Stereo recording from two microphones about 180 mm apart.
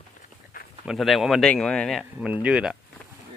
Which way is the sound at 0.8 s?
Centre (ahead or behind).